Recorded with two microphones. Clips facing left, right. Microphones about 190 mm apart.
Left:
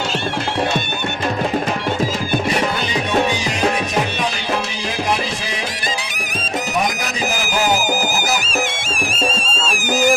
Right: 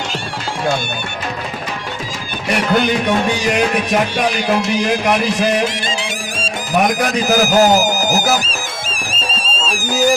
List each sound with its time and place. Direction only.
7.3 s music: 40° right (ahead or behind)